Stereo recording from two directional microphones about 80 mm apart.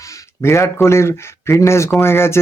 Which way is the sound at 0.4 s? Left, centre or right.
Left.